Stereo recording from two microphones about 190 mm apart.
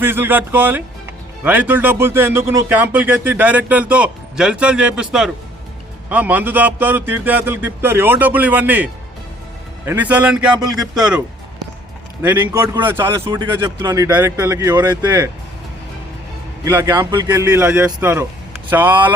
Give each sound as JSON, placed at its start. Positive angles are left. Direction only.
{"t": 0.0, "sound": "a man's voice", "side_deg": -10}
{"t": 12.2, "sound": "speech", "side_deg": -10}
{"t": 16.6, "sound": "speech", "side_deg": -15}